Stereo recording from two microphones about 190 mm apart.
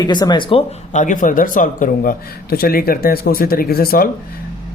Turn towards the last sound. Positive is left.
turn(degrees=50)  # may be behind; listen again after turning